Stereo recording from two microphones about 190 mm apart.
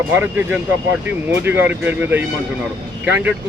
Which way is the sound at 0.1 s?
10° right (ahead or behind).